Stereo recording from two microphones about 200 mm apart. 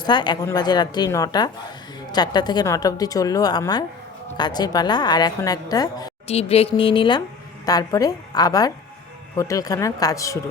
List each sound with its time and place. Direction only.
0.0 s speech: 20° left (ahead or behind)
6.2 s speech: 30° left (ahead or behind)